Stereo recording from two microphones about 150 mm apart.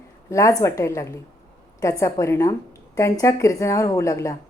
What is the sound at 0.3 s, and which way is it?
A woman's voice, 20° left (ahead or behind).